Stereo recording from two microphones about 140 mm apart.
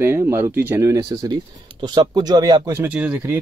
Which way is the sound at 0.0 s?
15° right (ahead or behind).